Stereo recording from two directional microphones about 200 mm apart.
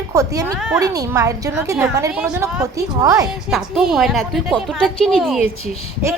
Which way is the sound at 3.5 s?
Centre (ahead or behind).